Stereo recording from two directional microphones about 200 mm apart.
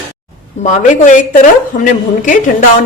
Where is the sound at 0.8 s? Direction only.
40° left (ahead or behind).